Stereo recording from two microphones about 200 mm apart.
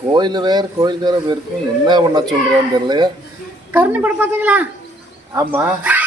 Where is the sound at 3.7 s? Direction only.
10° right (ahead or behind).